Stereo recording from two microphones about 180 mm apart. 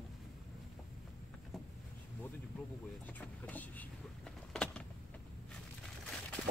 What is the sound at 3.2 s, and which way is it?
Speech, 10° left (ahead or behind).